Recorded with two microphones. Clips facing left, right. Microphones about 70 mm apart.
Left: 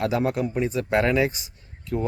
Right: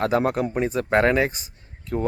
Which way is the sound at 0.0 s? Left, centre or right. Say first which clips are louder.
Right 2 dB; right.